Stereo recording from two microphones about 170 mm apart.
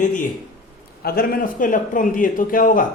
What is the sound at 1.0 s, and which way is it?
Speech, 60° left (ahead or behind).